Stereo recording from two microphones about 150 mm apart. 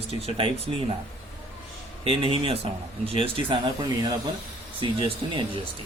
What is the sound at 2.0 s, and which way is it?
Speech, 40° right (ahead or behind).